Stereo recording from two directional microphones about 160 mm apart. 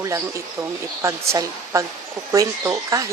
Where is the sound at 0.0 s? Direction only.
20° right (ahead or behind).